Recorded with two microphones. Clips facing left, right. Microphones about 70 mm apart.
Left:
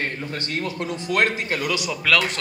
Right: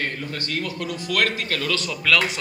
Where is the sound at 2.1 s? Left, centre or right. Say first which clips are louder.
Even; centre.